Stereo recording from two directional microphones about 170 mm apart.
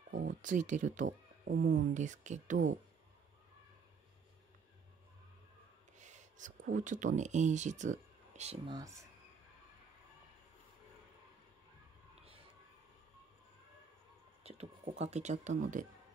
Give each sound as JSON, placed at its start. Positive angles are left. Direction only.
{"t": 0.4, "sound": "speech", "side_deg": -45}
{"t": 1.5, "sound": "speech", "side_deg": -90}
{"t": 1.8, "sound": "speech", "side_deg": -45}
{"t": 5.9, "sound": "speech", "side_deg": -45}
{"t": 8.6, "sound": "speech", "side_deg": -25}
{"t": 14.4, "sound": "speech", "side_deg": -35}